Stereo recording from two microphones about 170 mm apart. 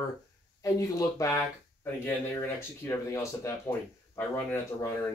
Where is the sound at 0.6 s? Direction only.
20° left (ahead or behind).